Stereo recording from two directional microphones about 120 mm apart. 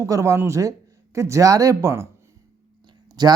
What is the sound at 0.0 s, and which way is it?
Speech, 25° right (ahead or behind).